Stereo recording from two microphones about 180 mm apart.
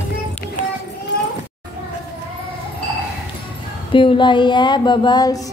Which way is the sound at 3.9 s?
30° left (ahead or behind).